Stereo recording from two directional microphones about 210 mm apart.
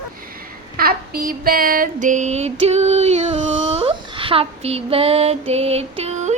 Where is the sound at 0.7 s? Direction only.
45° right (ahead or behind).